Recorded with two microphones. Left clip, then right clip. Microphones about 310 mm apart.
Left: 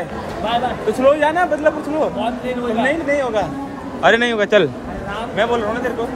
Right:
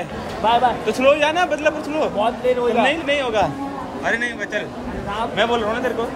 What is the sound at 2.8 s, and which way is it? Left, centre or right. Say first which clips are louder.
Speech: left 1 dB; centre.